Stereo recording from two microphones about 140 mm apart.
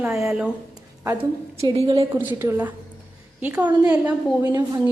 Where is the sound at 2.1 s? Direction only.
15° right (ahead or behind).